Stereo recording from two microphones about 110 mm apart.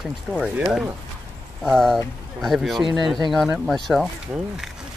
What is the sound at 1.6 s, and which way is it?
Speech, centre (ahead or behind).